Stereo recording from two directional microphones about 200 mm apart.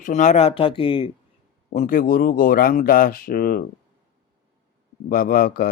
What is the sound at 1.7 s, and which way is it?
A man's voice, 40° left (ahead or behind).